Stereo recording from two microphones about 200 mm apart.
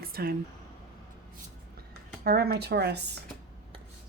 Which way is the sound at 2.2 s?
50° right (ahead or behind).